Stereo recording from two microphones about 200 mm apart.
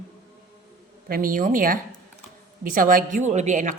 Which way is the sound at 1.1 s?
45° right (ahead or behind).